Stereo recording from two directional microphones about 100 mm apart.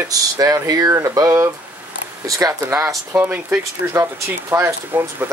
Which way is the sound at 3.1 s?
20° right (ahead or behind).